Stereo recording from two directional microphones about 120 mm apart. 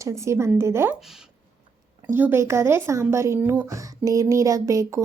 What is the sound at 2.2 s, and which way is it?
Speech, 15° right (ahead or behind).